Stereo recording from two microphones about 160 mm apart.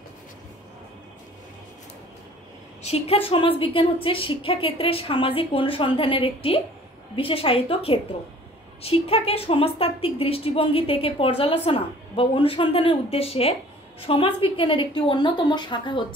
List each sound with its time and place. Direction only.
2.8 s a woman's voice: 40° left (ahead or behind)